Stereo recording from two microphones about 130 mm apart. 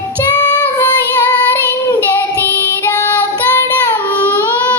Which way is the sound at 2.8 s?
15° left (ahead or behind).